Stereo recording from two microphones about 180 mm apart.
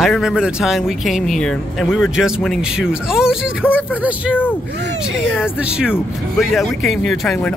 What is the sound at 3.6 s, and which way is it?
Speech, 10° left (ahead or behind).